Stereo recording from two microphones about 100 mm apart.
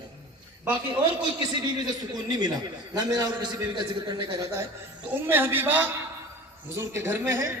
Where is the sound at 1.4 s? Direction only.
45° right (ahead or behind).